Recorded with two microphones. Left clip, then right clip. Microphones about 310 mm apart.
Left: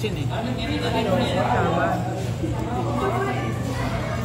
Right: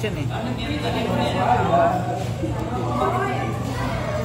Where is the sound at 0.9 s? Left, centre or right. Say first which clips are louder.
Left 1 dB; centre.